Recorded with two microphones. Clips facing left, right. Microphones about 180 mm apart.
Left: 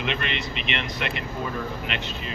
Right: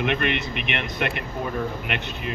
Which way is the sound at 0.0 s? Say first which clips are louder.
Right 5 dB; 55° right (ahead or behind).